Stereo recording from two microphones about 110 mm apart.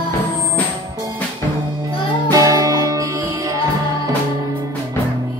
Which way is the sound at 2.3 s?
30° right (ahead or behind).